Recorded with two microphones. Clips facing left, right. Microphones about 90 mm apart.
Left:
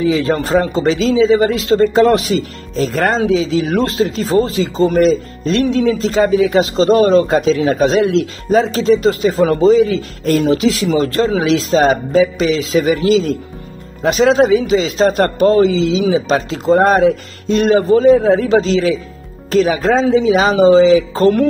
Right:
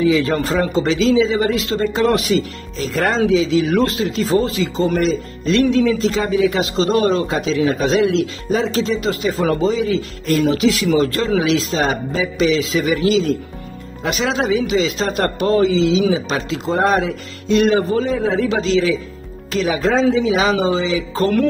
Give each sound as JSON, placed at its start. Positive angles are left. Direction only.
{"t": 0.0, "sound": "speech", "side_deg": 35}
{"t": 10.4, "sound": "speech", "side_deg": 35}